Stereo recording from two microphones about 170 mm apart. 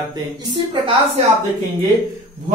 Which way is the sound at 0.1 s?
25° right (ahead or behind).